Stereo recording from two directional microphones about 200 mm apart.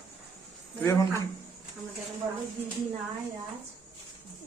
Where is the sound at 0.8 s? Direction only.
15° left (ahead or behind).